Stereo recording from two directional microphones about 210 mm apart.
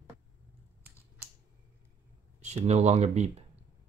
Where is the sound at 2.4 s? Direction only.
30° right (ahead or behind).